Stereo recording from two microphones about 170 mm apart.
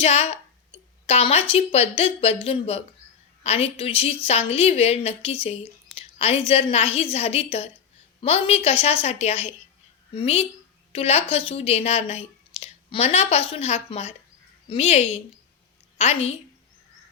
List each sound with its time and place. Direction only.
0.0 s a woman's voice: 35° left (ahead or behind)